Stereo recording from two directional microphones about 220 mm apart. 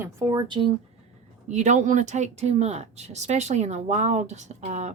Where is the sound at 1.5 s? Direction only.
30° right (ahead or behind).